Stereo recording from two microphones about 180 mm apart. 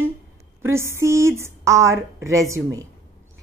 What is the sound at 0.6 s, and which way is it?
A woman's voice, 15° right (ahead or behind).